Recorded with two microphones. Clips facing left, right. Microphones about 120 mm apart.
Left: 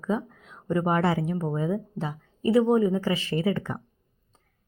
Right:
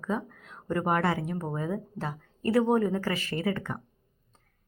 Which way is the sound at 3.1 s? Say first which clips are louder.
Left 4 dB; 25° left (ahead or behind).